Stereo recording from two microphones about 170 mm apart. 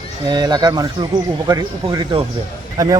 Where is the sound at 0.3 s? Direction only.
25° right (ahead or behind).